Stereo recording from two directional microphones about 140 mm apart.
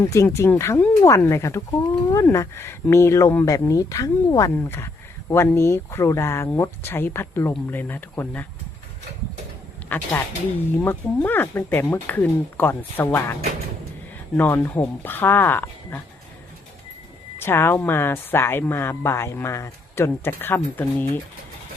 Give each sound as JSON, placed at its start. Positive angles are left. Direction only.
{"t": 0.0, "sound": "speech", "side_deg": 20}
{"t": 9.9, "sound": "speech", "side_deg": 15}
{"t": 14.3, "sound": "speech", "side_deg": 15}
{"t": 17.3, "sound": "speech", "side_deg": 15}